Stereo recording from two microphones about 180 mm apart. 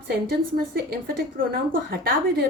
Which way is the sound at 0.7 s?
60° right (ahead or behind).